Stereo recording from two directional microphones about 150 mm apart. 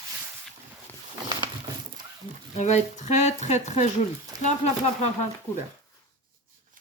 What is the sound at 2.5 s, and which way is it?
Speech, 50° left (ahead or behind).